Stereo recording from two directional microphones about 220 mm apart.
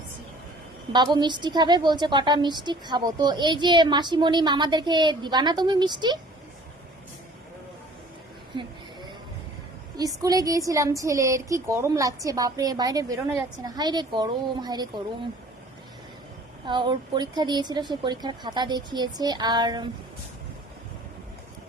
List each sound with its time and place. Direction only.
0.9 s a woman's voice: 20° right (ahead or behind)
10.0 s a woman's voice: 15° right (ahead or behind)
16.6 s a woman's voice: 20° right (ahead or behind)